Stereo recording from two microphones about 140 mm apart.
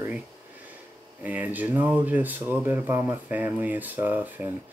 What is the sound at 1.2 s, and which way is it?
Speech, 10° right (ahead or behind).